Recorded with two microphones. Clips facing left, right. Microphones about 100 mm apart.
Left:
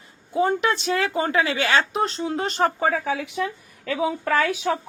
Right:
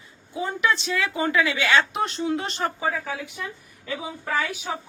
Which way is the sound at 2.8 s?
65° left (ahead or behind).